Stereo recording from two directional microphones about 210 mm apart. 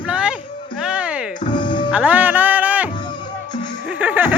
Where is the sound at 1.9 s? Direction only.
5° right (ahead or behind).